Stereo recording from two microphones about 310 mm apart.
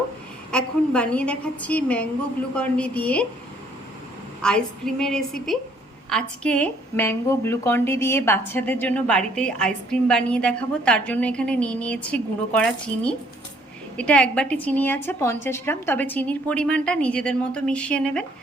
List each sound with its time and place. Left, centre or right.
0.5 s a woman's voice: centre
4.4 s a woman's voice: centre